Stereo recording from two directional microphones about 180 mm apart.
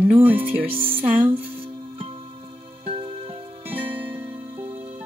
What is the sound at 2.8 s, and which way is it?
Music, 30° right (ahead or behind).